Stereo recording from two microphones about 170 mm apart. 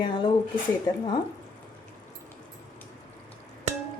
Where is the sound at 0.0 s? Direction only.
30° left (ahead or behind).